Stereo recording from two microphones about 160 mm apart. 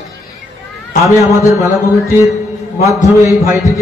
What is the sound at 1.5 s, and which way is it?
Speech, 20° right (ahead or behind).